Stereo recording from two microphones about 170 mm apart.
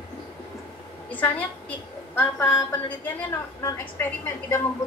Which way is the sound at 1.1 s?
10° left (ahead or behind).